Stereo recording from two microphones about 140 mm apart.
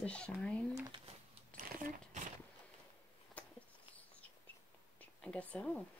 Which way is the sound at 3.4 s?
10° left (ahead or behind).